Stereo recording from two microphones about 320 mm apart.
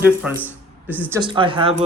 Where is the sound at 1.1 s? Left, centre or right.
Centre.